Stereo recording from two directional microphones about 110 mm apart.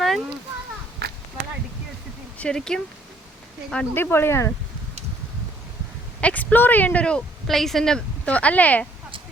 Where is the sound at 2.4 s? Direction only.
5° left (ahead or behind).